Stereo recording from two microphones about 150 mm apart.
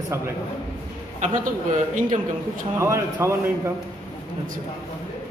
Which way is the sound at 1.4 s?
60° right (ahead or behind).